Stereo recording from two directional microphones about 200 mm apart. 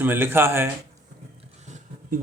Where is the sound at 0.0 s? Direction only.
10° right (ahead or behind).